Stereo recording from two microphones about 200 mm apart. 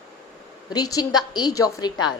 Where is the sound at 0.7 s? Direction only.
20° left (ahead or behind).